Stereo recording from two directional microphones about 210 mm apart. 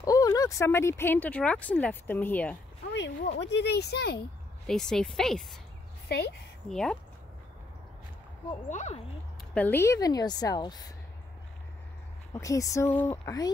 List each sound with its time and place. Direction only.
0.0 s speech: 15° left (ahead or behind)
2.9 s speech: 55° left (ahead or behind)
4.6 s a woman's voice: centre (ahead or behind)
6.0 s speech: 50° left (ahead or behind)
6.7 s a woman's voice: 5° left (ahead or behind)
8.6 s speech: 35° left (ahead or behind)
9.5 s speech: 10° left (ahead or behind)
12.4 s speech: 15° left (ahead or behind)